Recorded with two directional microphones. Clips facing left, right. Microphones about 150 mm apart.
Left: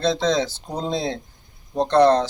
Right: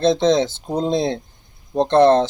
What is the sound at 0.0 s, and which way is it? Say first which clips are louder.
A man's voice: right 5 dB; 20° right (ahead or behind).